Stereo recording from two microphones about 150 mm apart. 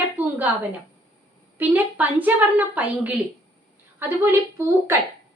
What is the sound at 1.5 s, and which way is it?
A woman's voice, 10° right (ahead or behind).